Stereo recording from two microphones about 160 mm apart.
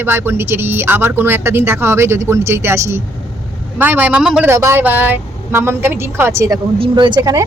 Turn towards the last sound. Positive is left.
turn(degrees=-25)  # may be behind; listen again after turning